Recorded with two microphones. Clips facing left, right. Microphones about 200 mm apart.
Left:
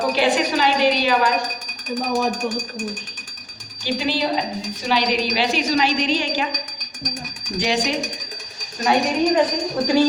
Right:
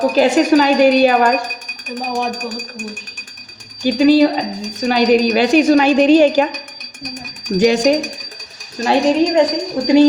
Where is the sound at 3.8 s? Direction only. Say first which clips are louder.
Right 12 dB; 45° right (ahead or behind).